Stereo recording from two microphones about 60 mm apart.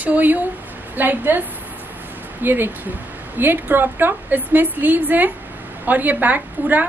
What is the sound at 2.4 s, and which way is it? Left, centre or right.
A woman's voice, right.